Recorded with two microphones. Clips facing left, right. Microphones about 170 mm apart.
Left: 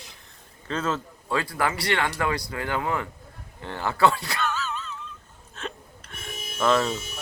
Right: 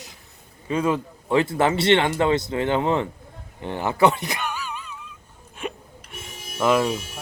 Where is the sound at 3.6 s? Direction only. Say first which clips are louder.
Right 3 dB; 20° right (ahead or behind).